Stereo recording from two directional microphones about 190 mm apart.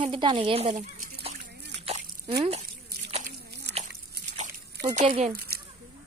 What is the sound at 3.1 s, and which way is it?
Biting, 35° right (ahead or behind).